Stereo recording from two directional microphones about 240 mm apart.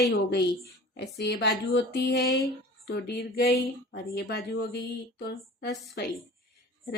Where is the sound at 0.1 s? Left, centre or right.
Left.